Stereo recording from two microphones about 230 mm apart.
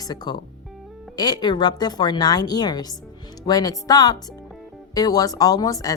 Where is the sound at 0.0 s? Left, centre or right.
Centre.